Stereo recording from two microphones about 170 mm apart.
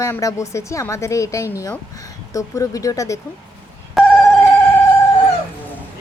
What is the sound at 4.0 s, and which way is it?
Telephone bell ringing, centre (ahead or behind).